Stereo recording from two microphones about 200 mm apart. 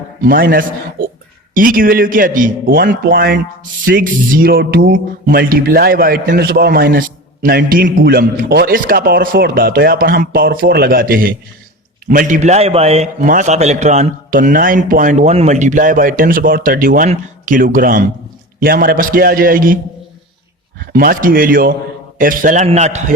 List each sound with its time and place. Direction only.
0.3 s a man's voice: 45° right (ahead or behind)